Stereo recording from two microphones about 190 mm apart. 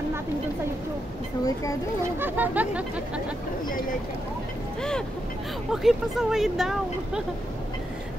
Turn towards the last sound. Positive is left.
turn(degrees=0)  # may be behind; listen again after turning